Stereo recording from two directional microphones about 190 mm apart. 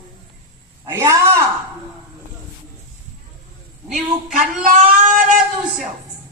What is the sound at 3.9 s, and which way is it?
Speech, 45° right (ahead or behind).